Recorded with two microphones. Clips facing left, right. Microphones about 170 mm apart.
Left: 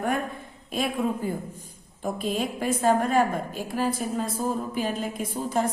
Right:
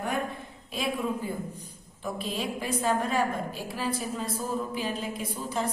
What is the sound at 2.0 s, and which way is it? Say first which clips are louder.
A woman's voice: left 4 dB; 50° left (ahead or behind).